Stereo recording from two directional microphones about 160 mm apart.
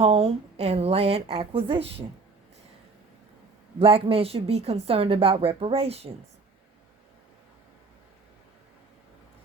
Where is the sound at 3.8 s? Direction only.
35° right (ahead or behind).